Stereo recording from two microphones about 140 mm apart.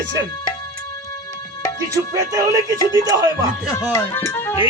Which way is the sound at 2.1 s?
25° right (ahead or behind).